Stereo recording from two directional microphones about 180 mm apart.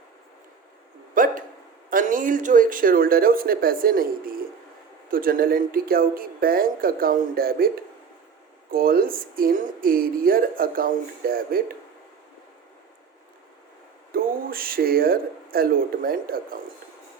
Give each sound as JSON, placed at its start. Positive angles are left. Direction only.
{"t": 1.1, "sound": "hiccup", "side_deg": -50}
{"t": 1.9, "sound": "speech", "side_deg": -50}
{"t": 8.7, "sound": "speech", "side_deg": -55}
{"t": 14.1, "sound": "speech", "side_deg": -55}